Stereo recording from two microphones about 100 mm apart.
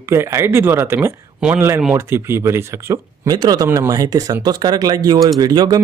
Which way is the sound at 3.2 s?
45° right (ahead or behind).